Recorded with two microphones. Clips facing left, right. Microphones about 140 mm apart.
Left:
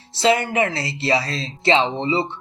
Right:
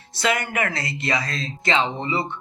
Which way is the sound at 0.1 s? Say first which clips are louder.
Left 5 dB; 30° left (ahead or behind).